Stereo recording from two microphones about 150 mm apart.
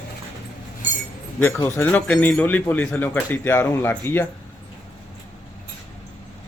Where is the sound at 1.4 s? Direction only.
15° left (ahead or behind).